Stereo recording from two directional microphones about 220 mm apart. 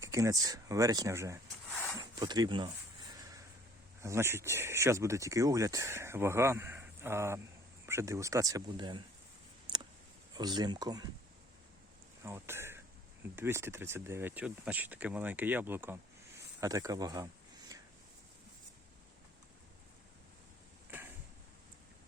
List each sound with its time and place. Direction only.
0.0 s speech: 15° right (ahead or behind)
3.2 s a sound: 15° right (ahead or behind)
4.0 s speech: 10° right (ahead or behind)
9.7 s a sound: 20° right (ahead or behind)
10.3 s speech: 20° right (ahead or behind)
12.2 s speech: 10° right (ahead or behind)